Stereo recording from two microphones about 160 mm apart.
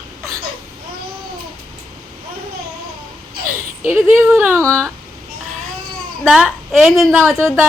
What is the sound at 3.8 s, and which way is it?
A woman's voice, 15° right (ahead or behind).